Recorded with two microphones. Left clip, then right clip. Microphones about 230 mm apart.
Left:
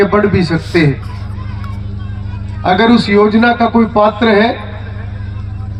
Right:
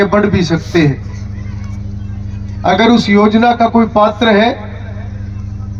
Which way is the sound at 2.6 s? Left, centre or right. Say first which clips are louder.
Even; right.